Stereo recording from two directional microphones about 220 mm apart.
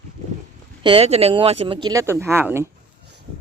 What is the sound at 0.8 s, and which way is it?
A woman's voice, 25° right (ahead or behind).